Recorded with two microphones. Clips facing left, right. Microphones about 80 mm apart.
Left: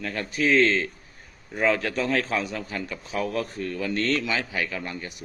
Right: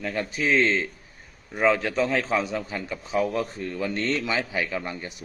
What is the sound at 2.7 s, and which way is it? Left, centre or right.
A man's voice, centre.